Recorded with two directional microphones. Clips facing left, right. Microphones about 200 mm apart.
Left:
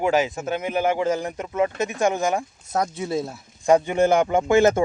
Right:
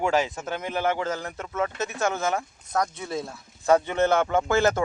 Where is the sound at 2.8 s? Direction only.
25° left (ahead or behind).